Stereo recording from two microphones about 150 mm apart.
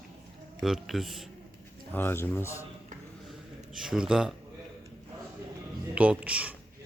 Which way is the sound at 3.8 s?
5° right (ahead or behind).